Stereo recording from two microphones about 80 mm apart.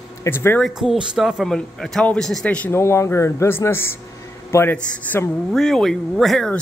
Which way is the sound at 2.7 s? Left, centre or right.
Left.